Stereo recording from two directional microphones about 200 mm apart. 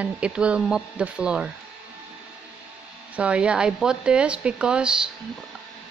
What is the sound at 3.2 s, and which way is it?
Speech, 5° right (ahead or behind).